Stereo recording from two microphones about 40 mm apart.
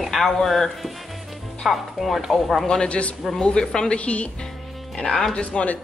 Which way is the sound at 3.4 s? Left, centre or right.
Centre.